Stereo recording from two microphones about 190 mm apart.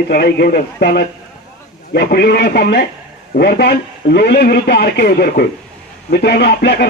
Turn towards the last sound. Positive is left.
turn(degrees=55)  # may be behind; listen again after turning